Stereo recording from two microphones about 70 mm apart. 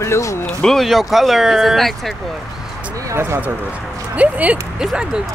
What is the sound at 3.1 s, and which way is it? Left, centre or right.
Speech, right.